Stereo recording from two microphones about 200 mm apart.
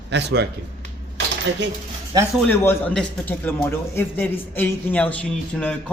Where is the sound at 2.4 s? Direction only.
10° left (ahead or behind).